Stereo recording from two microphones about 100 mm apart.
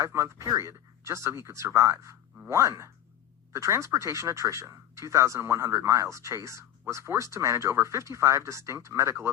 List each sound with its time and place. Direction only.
0.0 s speech: 30° right (ahead or behind)